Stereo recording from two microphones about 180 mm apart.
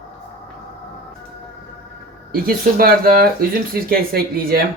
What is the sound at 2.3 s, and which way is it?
A man's voice, 55° right (ahead or behind).